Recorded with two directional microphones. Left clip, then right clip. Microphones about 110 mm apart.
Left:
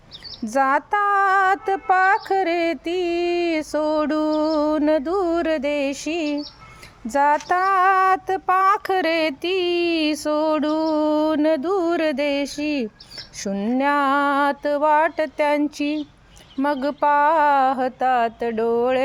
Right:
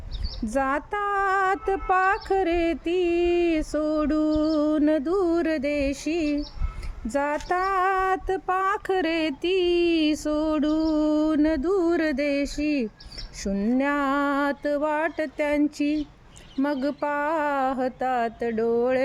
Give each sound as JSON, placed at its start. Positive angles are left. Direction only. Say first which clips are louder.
{"t": 0.4, "sound": "female singing", "louder": "left 6 dB", "side_deg": -35}